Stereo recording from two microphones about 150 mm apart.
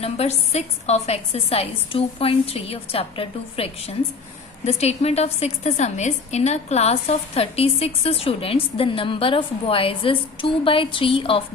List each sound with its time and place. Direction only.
0.0 s a woman's voice: 45° left (ahead or behind)